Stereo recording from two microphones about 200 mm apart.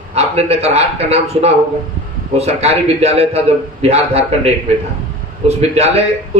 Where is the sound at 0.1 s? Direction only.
30° right (ahead or behind).